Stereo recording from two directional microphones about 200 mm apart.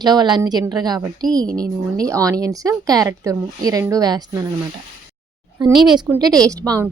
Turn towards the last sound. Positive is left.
turn(degrees=-15)  # may be behind; listen again after turning